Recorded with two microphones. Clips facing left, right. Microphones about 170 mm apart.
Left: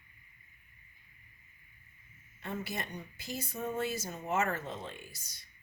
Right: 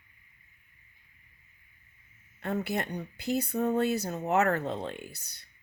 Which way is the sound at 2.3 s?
65° right (ahead or behind).